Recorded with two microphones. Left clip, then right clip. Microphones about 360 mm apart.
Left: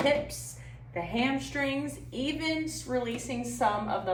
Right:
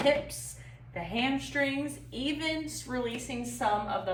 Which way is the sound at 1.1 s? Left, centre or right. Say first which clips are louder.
Right 1 dB; centre.